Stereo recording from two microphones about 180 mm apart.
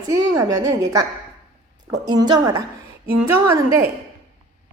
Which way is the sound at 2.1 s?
25° right (ahead or behind).